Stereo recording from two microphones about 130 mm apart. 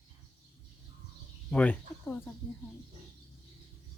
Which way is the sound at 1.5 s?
10° left (ahead or behind).